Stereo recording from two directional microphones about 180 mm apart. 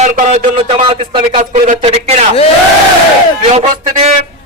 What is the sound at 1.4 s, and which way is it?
Speech, 45° right (ahead or behind).